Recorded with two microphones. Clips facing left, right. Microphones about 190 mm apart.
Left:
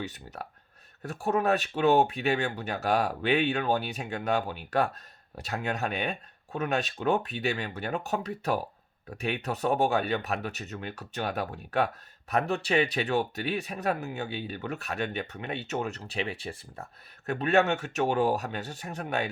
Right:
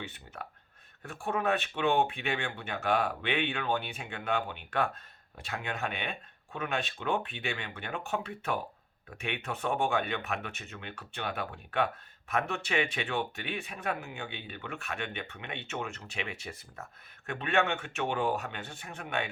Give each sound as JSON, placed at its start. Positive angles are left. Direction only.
{"t": 0.0, "sound": "speech", "side_deg": 40}